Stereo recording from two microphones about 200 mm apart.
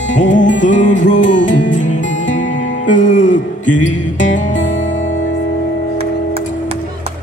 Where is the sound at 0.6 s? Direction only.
40° left (ahead or behind).